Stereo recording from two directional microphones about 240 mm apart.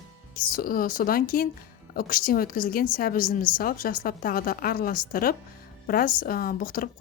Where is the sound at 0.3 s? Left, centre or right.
Left.